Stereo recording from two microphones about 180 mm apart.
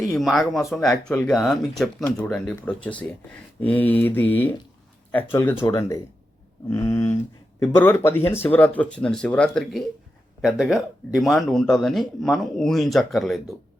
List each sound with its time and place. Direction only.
0.1 s speech: centre (ahead or behind)